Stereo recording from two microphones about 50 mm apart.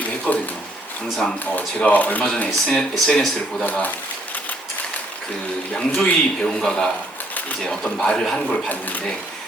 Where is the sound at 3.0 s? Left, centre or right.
Centre.